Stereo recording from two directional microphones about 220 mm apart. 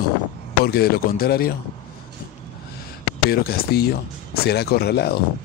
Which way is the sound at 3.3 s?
45° left (ahead or behind).